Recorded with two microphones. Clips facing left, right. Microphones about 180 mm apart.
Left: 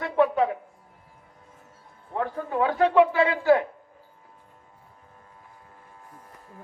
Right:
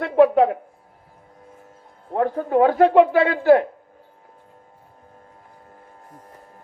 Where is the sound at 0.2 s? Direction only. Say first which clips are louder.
Right 7 dB; 40° right (ahead or behind).